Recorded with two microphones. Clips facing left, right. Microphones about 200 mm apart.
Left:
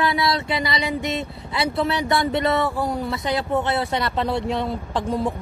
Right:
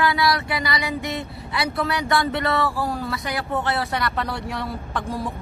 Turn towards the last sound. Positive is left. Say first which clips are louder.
# left 4 dB
turn(degrees=20)  # may be behind; listen again after turning